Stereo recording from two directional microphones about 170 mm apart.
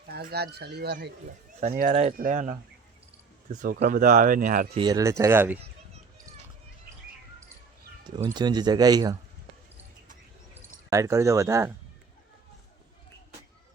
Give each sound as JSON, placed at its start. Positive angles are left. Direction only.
{"t": 0.1, "sound": "speech", "side_deg": -65}
{"t": 1.7, "sound": "speech", "side_deg": -55}
{"t": 4.7, "sound": "speech", "side_deg": -25}
{"t": 8.4, "sound": "speech", "side_deg": -25}
{"t": 10.5, "sound": "speech", "side_deg": -15}